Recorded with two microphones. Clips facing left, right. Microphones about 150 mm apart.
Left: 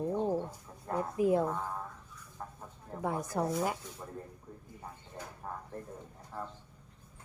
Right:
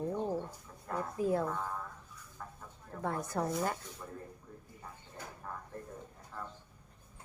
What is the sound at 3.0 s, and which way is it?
Speech, 10° left (ahead or behind).